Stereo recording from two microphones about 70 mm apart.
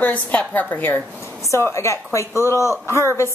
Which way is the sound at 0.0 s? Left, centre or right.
Left.